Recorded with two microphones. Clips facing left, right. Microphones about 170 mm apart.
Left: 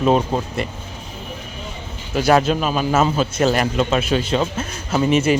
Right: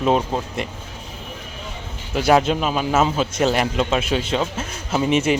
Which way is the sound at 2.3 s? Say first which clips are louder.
Even; 20° right (ahead or behind).